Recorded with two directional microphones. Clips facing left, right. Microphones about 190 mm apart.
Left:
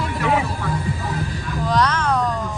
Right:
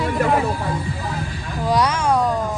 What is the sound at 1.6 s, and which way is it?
Speech, 10° right (ahead or behind).